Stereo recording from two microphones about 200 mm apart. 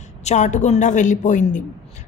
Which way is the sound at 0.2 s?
35° left (ahead or behind).